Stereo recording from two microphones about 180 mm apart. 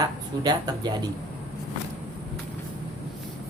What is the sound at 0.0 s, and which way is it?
Speech, 20° right (ahead or behind).